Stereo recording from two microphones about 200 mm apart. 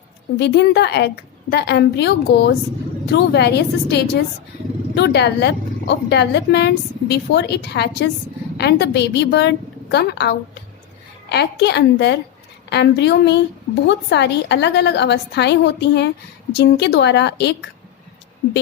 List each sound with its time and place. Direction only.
0.3 s speech: 60° left (ahead or behind)